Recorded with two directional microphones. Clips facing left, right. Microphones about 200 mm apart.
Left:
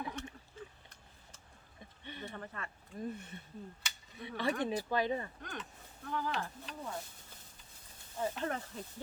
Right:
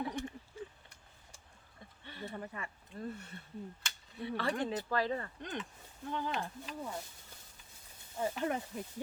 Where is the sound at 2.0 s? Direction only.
20° left (ahead or behind).